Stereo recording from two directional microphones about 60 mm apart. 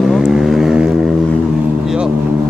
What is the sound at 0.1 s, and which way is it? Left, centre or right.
Vehicle, centre.